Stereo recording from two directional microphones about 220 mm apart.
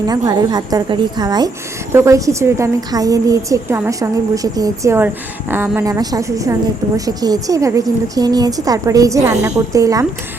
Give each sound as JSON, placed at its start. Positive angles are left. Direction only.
{"t": 0.1, "sound": "a woman's voice", "side_deg": -15}